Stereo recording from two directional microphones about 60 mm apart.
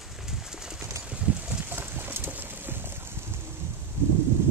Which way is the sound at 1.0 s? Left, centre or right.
Right.